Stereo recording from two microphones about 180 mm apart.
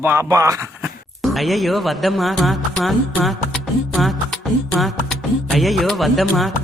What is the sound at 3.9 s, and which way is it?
Music, centre (ahead or behind).